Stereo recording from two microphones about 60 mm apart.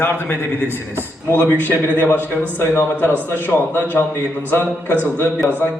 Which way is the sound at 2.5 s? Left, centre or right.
Left.